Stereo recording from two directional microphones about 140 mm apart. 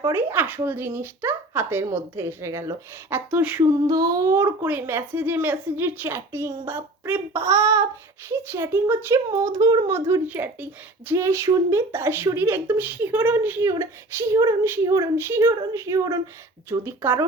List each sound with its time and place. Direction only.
0.1 s speech: 15° right (ahead or behind)
3.8 s speech: 25° right (ahead or behind)
9.8 s speech: 20° right (ahead or behind)